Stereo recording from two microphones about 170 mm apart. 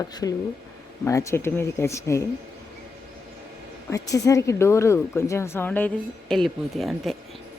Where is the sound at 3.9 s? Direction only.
20° left (ahead or behind); by 7.1 s centre (ahead or behind).